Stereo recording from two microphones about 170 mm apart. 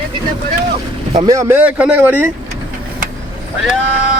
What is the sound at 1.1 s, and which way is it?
Speech, 20° right (ahead or behind).